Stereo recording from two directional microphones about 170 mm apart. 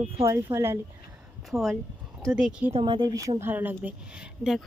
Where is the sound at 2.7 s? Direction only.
35° right (ahead or behind); by 4.6 s centre (ahead or behind).